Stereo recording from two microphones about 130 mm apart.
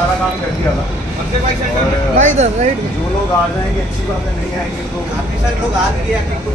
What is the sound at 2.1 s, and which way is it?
Speech, 60° right (ahead or behind).